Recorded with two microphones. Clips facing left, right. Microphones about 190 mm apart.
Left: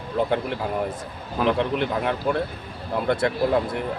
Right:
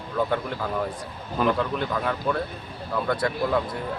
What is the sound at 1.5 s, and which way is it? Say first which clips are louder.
A man's voice: left 3 dB; 20° left (ahead or behind).